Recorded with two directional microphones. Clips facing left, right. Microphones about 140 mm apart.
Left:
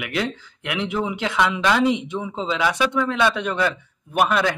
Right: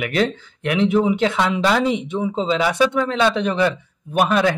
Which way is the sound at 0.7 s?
30° right (ahead or behind).